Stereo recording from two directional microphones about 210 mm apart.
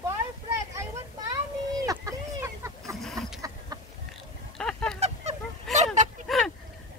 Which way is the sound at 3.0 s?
Centre (ahead or behind).